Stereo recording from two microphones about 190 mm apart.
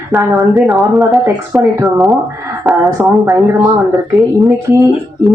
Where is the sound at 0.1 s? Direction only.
10° right (ahead or behind).